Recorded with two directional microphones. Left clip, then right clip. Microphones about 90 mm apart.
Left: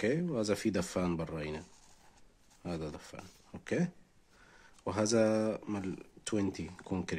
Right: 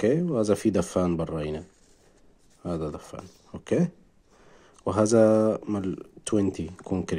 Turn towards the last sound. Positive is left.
turn(degrees=-30)  # may be behind; listen again after turning